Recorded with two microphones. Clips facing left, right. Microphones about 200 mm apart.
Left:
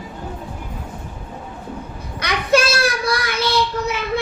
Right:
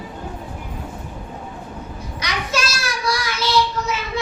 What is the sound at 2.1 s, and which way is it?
Child singing, 60° left (ahead or behind).